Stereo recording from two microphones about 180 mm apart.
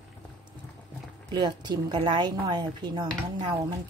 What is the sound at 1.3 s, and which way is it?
Speech, 25° right (ahead or behind).